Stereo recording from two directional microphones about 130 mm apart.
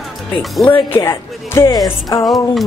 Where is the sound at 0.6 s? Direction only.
40° left (ahead or behind).